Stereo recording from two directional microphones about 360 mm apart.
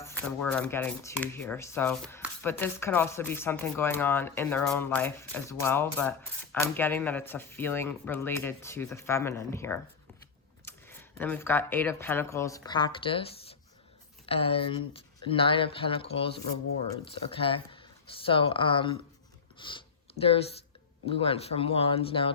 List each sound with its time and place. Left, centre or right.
0.0 s speech: centre
19.5 s a sound: centre
21.1 s speech: centre